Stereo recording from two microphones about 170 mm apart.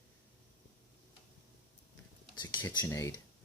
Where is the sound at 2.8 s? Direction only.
15° left (ahead or behind).